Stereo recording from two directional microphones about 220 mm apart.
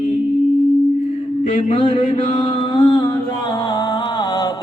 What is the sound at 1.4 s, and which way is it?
Mantra, 25° left (ahead or behind).